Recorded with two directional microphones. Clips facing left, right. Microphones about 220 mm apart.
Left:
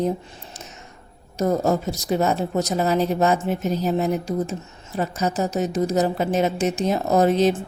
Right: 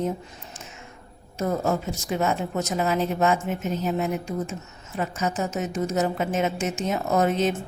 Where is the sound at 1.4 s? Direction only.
35° left (ahead or behind).